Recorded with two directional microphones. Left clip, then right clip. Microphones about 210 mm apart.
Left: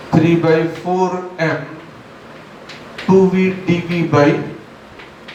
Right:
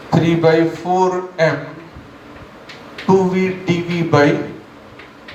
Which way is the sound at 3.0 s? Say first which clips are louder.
Left 2 dB; 35° right (ahead or behind).